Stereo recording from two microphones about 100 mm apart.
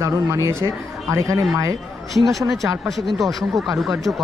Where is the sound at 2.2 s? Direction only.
Centre (ahead or behind).